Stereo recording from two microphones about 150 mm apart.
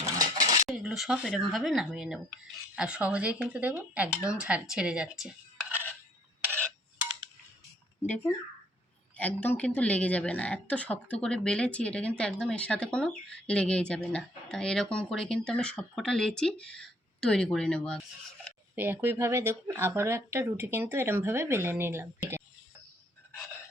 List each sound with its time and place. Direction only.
0.0 s cutlery: 25° right (ahead or behind)
0.7 s speech: centre (ahead or behind)
8.0 s speech: 10° left (ahead or behind)
18.8 s speech: 15° right (ahead or behind)